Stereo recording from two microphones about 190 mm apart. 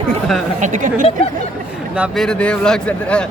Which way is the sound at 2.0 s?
5° left (ahead or behind).